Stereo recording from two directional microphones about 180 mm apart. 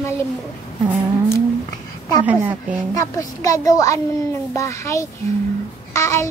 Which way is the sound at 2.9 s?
20° left (ahead or behind).